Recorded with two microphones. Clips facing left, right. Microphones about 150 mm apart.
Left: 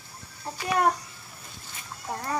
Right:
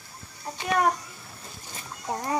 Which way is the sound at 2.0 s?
15° right (ahead or behind).